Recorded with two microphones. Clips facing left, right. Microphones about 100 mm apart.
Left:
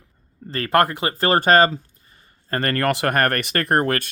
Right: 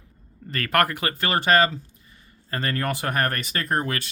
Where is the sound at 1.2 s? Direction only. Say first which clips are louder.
Left 5 dB; 40° left (ahead or behind).